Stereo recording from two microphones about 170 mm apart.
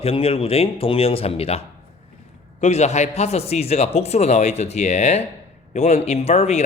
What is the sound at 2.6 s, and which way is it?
Speech, 40° left (ahead or behind).